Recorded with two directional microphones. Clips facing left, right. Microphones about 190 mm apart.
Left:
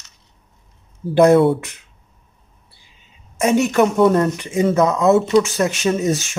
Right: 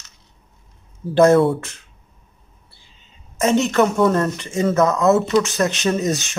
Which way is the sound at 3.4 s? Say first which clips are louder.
Left 1 dB; 10° left (ahead or behind).